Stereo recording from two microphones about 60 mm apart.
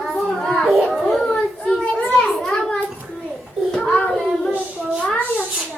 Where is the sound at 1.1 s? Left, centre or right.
Centre.